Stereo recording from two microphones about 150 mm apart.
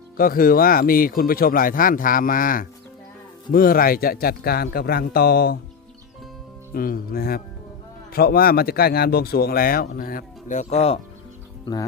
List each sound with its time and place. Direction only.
0.2 s speech: 70° left (ahead or behind); by 5.5 s 90° left
6.7 s speech: 75° left (ahead or behind); by 11.0 s 45° left (ahead or behind)
11.6 s speech: 25° left (ahead or behind)